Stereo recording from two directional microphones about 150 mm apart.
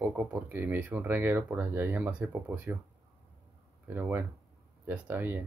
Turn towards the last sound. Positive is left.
turn(degrees=-15)  # may be behind; listen again after turning